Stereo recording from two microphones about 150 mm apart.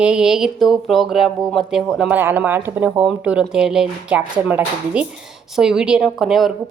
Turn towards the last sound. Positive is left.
turn(degrees=0)  # may be behind; listen again after turning